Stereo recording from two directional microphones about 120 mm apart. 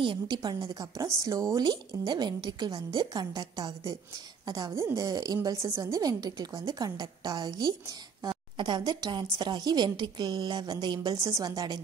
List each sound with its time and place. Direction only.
0.0 s a woman's voice: 40° right (ahead or behind)
1.6 s a woman's voice: 35° right (ahead or behind)